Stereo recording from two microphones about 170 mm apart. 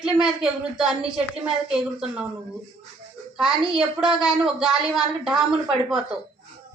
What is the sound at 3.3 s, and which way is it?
A child's voice, 5° right (ahead or behind).